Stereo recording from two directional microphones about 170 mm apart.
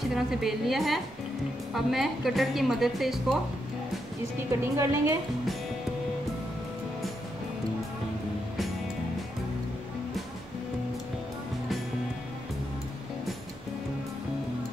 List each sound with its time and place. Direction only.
0.1 s a woman's voice: centre (ahead or behind)
4.7 s a woman's voice: 15° right (ahead or behind)